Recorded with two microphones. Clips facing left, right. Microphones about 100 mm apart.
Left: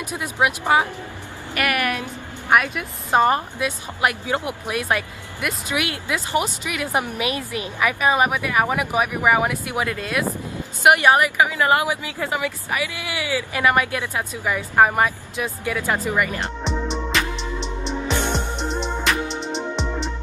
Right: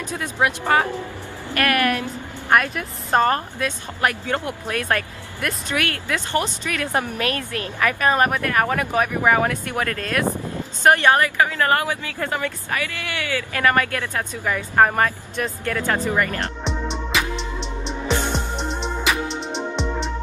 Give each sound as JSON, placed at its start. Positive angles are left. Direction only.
{"t": 0.0, "sound": "a woman's voice", "side_deg": 15}
{"t": 16.3, "sound": "music", "side_deg": 0}